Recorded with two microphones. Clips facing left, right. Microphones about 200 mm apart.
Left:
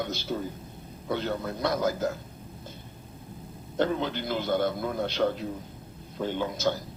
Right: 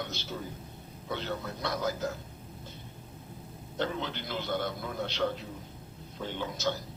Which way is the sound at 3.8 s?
50° left (ahead or behind).